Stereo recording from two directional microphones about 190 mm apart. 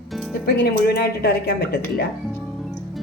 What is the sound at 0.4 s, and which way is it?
Speech, 60° left (ahead or behind).